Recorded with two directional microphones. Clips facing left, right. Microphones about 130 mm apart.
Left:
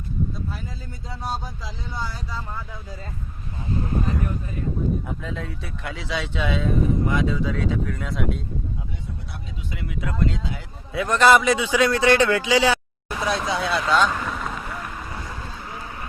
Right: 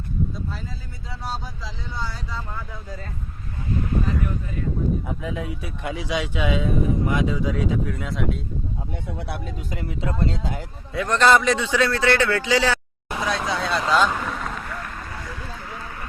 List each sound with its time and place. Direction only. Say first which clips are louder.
3.7 s speech: right 1 dB; 30° left (ahead or behind)
5.0 s speech: right 2 dB; 10° right (ahead or behind)
9.0 s speech: right 6 dB; 70° right (ahead or behind)
9.7 s speech: even; 35° right (ahead or behind)
10.4 s speech: right 3 dB; 50° right (ahead or behind)
10.9 s a man's voice: left 1 dB; 5° left (ahead or behind)
13.2 s vehicle: left 1 dB; 10° left (ahead or behind)
15.7 s a sound: even; 25° left (ahead or behind)